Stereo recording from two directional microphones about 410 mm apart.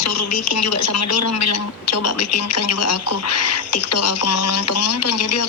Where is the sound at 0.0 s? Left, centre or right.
Left.